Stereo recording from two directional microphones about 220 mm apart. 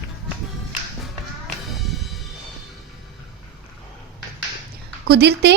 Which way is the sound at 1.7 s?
Centre (ahead or behind).